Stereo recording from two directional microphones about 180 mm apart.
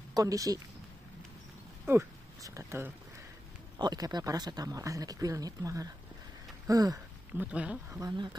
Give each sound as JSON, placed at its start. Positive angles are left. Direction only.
{"t": 0.1, "sound": "speech", "side_deg": -20}
{"t": 1.9, "sound": "speech", "side_deg": -15}
{"t": 6.7, "sound": "a sound", "side_deg": -20}
{"t": 7.5, "sound": "speech", "side_deg": -5}
{"t": 8.0, "sound": "speech", "side_deg": -25}